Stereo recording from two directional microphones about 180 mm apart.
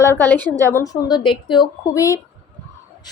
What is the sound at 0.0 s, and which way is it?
A woman's voice, 10° left (ahead or behind).